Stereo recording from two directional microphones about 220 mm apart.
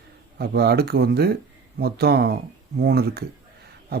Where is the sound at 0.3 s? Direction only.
45° right (ahead or behind).